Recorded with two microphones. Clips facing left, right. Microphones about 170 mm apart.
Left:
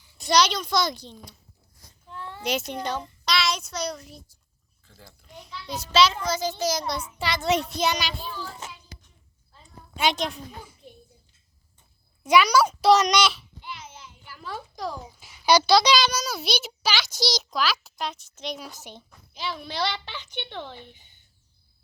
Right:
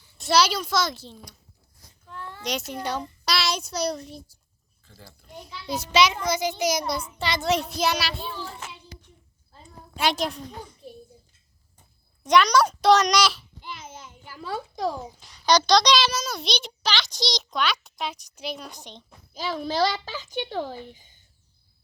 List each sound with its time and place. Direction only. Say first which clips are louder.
0.2 s a child's voice: even; 5° right (ahead or behind)
2.4 s a child's voice: left 2 dB; 5° left (ahead or behind)
8.7 s child singing: right 2 dB; 30° right (ahead or behind)
9.9 s a child's voice: even; centre (ahead or behind)
12.2 s a child's voice: even; 5° left (ahead or behind)
13.6 s a sound: right 1 dB; 45° right (ahead or behind)
15.2 s a child's voice: left 1 dB; 5° left (ahead or behind)
19.3 s a child's voice: right 5 dB; 45° right (ahead or behind)